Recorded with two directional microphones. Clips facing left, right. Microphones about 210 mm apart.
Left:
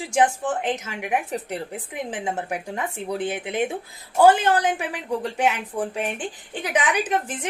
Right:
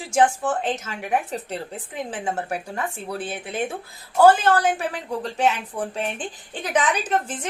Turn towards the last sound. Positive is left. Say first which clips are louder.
# even
turn(degrees=15)  # may be behind; listen again after turning